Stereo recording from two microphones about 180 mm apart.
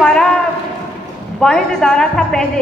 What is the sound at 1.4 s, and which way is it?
Speech, 5° left (ahead or behind).